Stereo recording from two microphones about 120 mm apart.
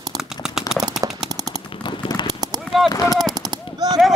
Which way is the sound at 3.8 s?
35° right (ahead or behind).